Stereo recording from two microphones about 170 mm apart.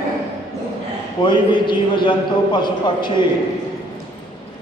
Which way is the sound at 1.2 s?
25° left (ahead or behind).